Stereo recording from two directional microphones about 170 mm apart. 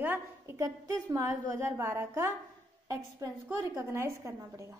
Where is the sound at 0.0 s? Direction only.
15° right (ahead or behind).